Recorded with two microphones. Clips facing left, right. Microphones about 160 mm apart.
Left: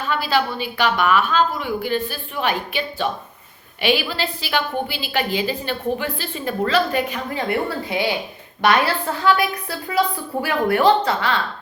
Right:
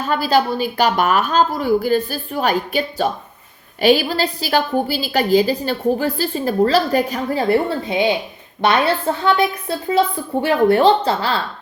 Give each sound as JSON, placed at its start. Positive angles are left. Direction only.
{"t": 0.0, "sound": "a woman's voice", "side_deg": -40}
{"t": 7.9, "sound": "a woman's voice", "side_deg": -20}